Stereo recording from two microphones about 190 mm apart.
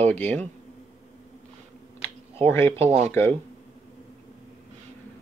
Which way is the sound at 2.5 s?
15° left (ahead or behind).